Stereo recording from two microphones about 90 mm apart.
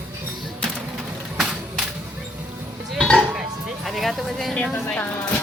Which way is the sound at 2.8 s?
5° left (ahead or behind).